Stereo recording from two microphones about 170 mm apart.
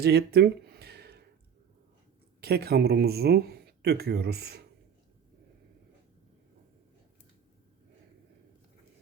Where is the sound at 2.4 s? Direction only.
70° right (ahead or behind).